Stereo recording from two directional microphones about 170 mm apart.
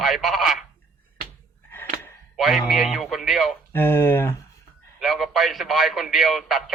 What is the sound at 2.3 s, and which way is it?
Speech, centre (ahead or behind).